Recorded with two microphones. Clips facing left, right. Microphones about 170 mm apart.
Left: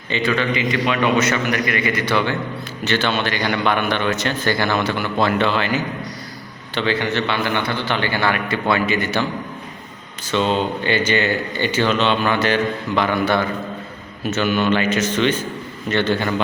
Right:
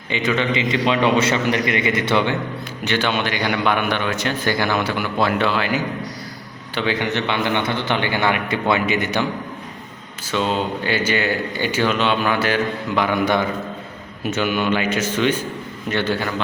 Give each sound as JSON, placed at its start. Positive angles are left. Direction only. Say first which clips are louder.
{"t": 0.1, "sound": "a man's voice", "louder": "even", "side_deg": -20}
{"t": 10.3, "sound": "speech", "louder": "left 2 dB", "side_deg": -5}